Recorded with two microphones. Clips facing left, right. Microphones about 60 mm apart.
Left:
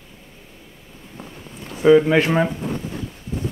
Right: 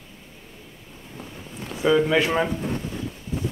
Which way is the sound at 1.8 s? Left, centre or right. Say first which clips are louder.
Left 6 dB; left.